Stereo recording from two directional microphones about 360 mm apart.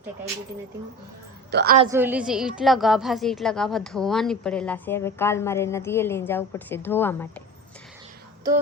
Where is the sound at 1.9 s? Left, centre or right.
Centre.